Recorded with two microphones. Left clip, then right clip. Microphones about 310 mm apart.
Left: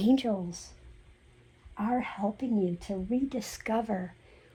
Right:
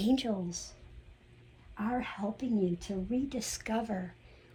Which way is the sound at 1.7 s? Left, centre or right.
Left.